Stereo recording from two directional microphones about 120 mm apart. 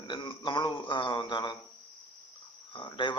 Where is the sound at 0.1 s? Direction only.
40° left (ahead or behind).